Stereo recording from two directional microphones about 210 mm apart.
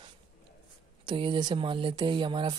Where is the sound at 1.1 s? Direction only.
20° right (ahead or behind).